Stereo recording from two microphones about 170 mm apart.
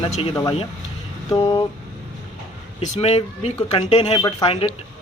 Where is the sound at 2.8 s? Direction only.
35° left (ahead or behind).